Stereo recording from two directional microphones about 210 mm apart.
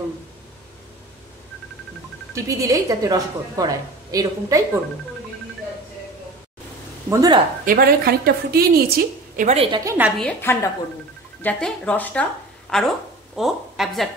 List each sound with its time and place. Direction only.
2.3 s a woman's voice: 15° right (ahead or behind)
7.1 s a woman's voice: 15° right (ahead or behind)
7.6 s a woman's voice: 45° right (ahead or behind)
9.5 s a woman's voice: 30° right (ahead or behind)
9.8 s a woman's voice: 10° right (ahead or behind)
10.1 s a woman's voice: 10° left (ahead or behind)